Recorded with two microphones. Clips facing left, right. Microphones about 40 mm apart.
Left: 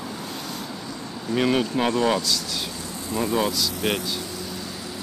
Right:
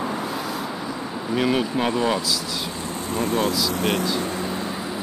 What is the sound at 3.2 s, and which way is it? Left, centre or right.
Speech, right.